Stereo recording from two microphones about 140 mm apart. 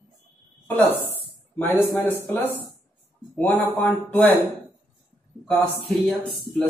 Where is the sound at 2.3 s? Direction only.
15° left (ahead or behind).